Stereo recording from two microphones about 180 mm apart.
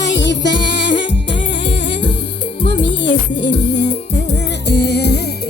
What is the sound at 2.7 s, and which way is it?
Music, 75° left (ahead or behind).